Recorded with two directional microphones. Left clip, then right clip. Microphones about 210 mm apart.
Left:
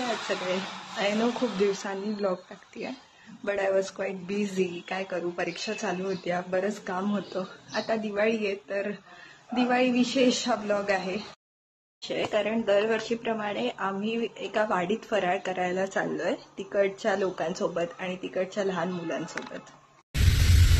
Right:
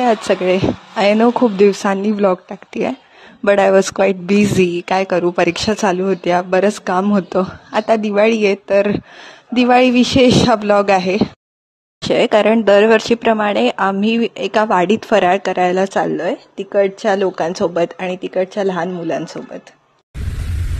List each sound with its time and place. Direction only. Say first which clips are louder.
0.3 s speech: right 15 dB; 50° right (ahead or behind)
1.6 s speech: right 15 dB; 50° right (ahead or behind)